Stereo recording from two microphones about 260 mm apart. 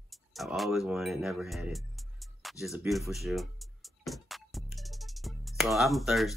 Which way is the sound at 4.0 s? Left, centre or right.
Centre.